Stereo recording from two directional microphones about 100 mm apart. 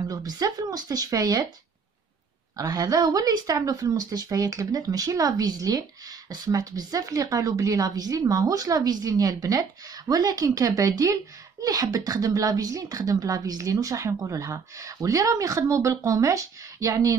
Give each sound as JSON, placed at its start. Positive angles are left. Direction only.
{"t": 0.1, "sound": "speech", "side_deg": -35}
{"t": 2.5, "sound": "speech", "side_deg": -35}